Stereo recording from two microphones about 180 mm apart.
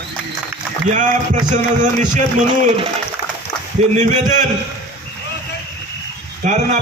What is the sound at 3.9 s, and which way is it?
Speech, 40° right (ahead or behind).